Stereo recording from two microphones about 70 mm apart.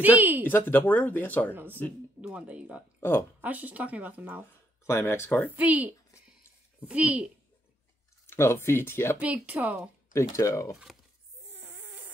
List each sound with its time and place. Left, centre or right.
0.0 s speech: right
0.5 s speech: left
1.5 s speech: right
3.0 s speech: left
3.3 s speech: right
4.8 s speech: left
5.6 s speech: right
8.3 s speech: left
9.2 s speech: right
10.1 s speech: left
11.5 s snoring: right